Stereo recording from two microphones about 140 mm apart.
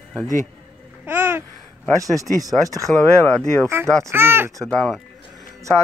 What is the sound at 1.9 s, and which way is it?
Speech, 25° right (ahead or behind).